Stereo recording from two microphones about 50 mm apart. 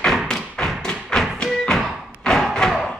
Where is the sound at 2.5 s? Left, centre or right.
Centre.